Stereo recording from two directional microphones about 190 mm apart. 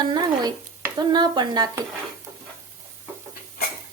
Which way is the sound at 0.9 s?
20° right (ahead or behind).